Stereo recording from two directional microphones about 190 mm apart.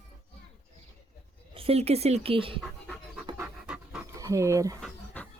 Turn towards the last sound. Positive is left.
turn(degrees=-15)  # may be behind; listen again after turning